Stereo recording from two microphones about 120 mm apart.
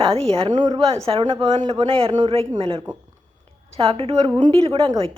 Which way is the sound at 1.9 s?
50° right (ahead or behind).